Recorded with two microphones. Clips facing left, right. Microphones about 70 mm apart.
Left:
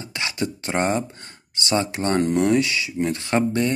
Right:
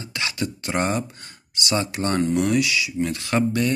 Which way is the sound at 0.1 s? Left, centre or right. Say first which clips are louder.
Left 1 dB; left.